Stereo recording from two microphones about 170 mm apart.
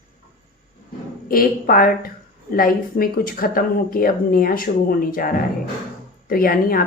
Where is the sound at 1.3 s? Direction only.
60° left (ahead or behind).